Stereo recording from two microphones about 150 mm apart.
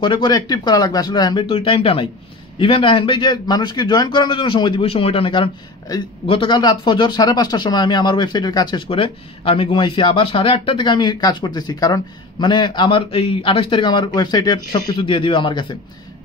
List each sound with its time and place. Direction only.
0.0 s speech: 30° left (ahead or behind)